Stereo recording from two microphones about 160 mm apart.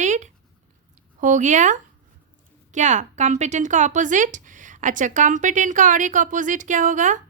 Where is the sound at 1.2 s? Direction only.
50° right (ahead or behind).